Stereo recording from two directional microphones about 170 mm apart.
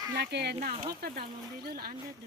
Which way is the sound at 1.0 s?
65° right (ahead or behind).